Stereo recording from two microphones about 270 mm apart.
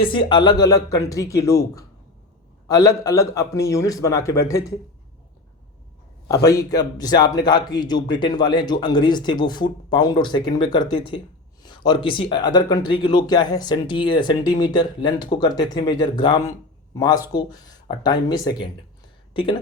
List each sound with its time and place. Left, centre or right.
0.3 s speech: centre
6.5 s speech: centre